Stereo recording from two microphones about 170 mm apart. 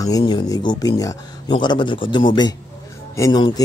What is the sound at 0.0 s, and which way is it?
Speech, 25° left (ahead or behind).